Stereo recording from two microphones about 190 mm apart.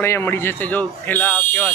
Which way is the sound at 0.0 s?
10° left (ahead or behind).